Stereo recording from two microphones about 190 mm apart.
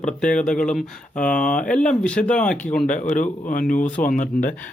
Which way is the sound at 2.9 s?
40° left (ahead or behind).